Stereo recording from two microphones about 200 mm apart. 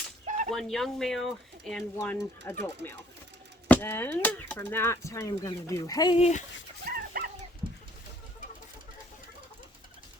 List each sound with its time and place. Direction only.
0.3 s whip: 40° right (ahead or behind)
0.5 s speech: centre (ahead or behind)
2.0 s speech: 15° left (ahead or behind); by 6.4 s 30° left (ahead or behind)
6.9 s dog: 50° right (ahead or behind)